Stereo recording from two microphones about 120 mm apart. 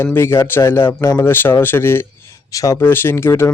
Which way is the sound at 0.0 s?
20° left (ahead or behind).